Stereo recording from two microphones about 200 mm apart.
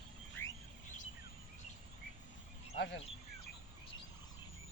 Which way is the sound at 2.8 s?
60° left (ahead or behind).